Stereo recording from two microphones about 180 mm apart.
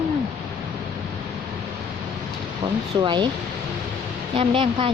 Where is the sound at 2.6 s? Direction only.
25° right (ahead or behind).